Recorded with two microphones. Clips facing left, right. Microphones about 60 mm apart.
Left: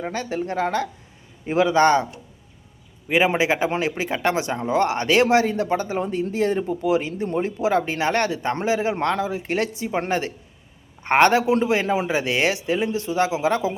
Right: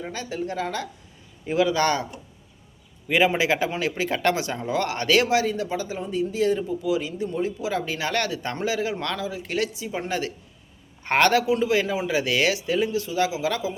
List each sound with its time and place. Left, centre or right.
0.0 s a man's voice: left
3.1 s a man's voice: left